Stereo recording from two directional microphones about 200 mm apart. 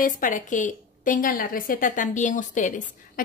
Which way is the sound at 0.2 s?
40° left (ahead or behind).